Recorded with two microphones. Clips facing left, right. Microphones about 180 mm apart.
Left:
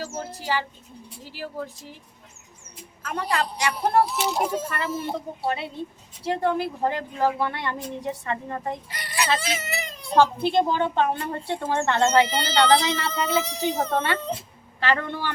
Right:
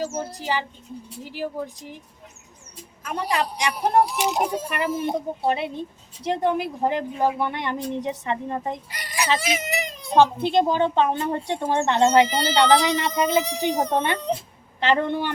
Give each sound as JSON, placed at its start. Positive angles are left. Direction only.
{"t": 0.0, "sound": "bird", "side_deg": -15}
{"t": 1.2, "sound": "a woman's voice", "side_deg": -15}
{"t": 3.0, "sound": "a woman's voice", "side_deg": -15}